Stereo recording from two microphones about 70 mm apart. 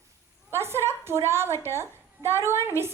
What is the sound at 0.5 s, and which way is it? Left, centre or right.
A child's voice, right.